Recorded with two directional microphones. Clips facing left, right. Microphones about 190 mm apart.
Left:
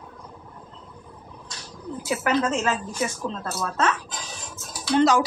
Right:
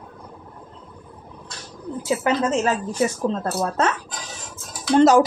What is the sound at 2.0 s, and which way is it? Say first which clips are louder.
A woman's voice: right 2 dB; 25° right (ahead or behind).